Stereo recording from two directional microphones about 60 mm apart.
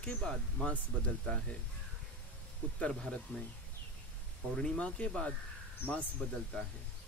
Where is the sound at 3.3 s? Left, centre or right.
Left.